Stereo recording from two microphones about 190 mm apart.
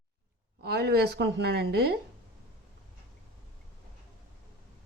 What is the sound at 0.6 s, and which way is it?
A woman's voice, 60° right (ahead or behind).